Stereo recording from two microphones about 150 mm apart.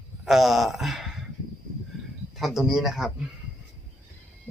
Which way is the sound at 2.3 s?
Centre (ahead or behind).